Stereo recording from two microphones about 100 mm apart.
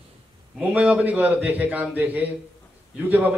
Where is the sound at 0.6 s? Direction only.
10° right (ahead or behind).